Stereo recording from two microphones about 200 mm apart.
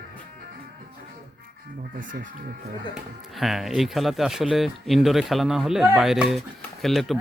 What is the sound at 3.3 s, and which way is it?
Speech, centre (ahead or behind).